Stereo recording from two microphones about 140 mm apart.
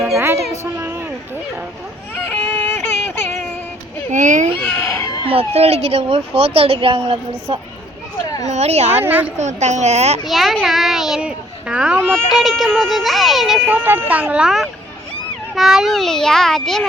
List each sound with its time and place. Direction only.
0.6 s speech: 20° right (ahead or behind)
2.3 s a sound: 10° left (ahead or behind)
4.1 s speech: 60° right (ahead or behind)
4.6 s baby cry: 15° left (ahead or behind)
5.2 s a woman's voice: 45° right (ahead or behind)
8.4 s a woman's voice: 50° right (ahead or behind)
8.9 s speech: 15° right (ahead or behind)
9.4 s a woman's voice: 55° right (ahead or behind)
10.2 s a child's voice: centre (ahead or behind)
13.8 s a child's voice: 10° right (ahead or behind); by 16.8 s 5° left (ahead or behind)